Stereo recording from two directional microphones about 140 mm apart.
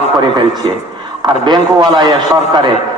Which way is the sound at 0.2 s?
35° right (ahead or behind).